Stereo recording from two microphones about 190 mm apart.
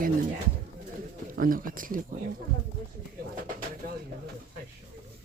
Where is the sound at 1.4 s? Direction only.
45° right (ahead or behind).